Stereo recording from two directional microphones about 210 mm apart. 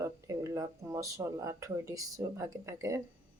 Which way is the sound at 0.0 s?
15° right (ahead or behind).